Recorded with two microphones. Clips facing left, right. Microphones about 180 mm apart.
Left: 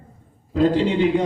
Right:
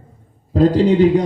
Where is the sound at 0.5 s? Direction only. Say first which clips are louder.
Right 5 dB; 40° right (ahead or behind).